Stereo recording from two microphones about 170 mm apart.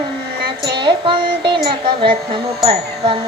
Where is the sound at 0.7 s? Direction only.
30° right (ahead or behind).